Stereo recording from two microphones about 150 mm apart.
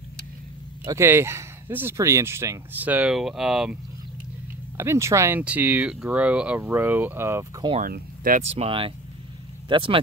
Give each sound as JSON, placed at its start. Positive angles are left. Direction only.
{"t": 0.8, "sound": "speech", "side_deg": -15}
{"t": 4.7, "sound": "speech", "side_deg": -20}
{"t": 7.8, "sound": "speech", "side_deg": -70}
{"t": 8.4, "sound": "speech", "side_deg": -45}